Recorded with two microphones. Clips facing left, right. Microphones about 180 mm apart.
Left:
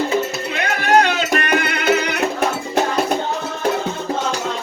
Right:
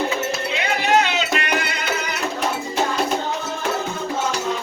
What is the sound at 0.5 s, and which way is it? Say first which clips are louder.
Music: left 4 dB; 50° left (ahead or behind).